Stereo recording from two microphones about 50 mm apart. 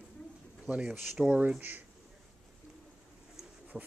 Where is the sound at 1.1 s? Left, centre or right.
Centre.